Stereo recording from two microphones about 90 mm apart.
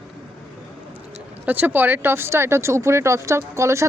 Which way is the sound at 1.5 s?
20° right (ahead or behind).